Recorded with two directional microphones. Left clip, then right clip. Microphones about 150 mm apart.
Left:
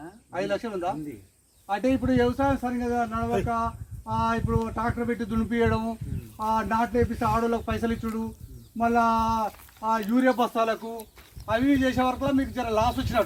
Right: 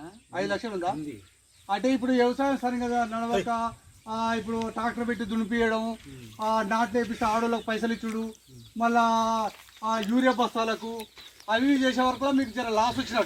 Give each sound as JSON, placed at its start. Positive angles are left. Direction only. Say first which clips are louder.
{"t": 0.3, "sound": "a man's voice", "louder": "left 1 dB", "side_deg": 20}